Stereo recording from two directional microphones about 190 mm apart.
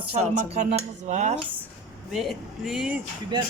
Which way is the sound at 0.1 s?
35° right (ahead or behind).